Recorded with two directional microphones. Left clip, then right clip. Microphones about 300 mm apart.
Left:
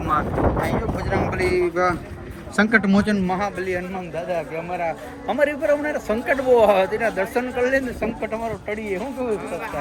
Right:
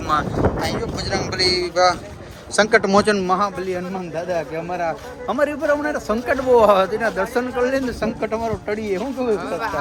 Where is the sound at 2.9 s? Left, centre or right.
Right.